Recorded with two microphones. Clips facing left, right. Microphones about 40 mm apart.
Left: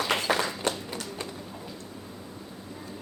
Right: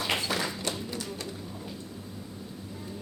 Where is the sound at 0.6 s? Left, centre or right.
Left.